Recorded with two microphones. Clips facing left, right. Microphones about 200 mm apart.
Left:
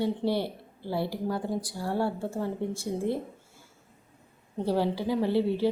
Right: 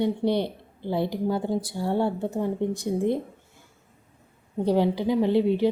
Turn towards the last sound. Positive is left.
turn(degrees=-15)  # may be behind; listen again after turning